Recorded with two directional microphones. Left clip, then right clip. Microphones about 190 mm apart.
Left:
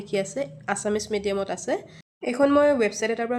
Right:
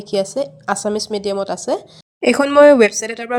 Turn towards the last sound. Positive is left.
turn(degrees=-50)  # may be behind; listen again after turning